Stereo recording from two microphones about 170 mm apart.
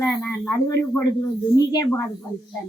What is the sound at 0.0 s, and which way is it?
A woman's voice, 15° left (ahead or behind).